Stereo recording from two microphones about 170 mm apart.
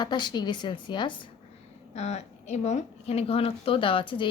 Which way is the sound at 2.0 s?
40° left (ahead or behind).